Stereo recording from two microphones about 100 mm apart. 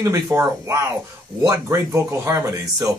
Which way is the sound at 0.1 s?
30° right (ahead or behind).